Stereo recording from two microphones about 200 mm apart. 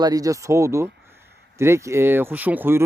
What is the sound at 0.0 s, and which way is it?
Speech, 20° right (ahead or behind).